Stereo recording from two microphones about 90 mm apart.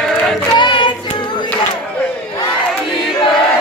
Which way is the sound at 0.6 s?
60° left (ahead or behind).